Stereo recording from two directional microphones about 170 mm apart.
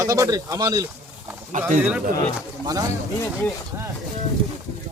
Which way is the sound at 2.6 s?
20° right (ahead or behind).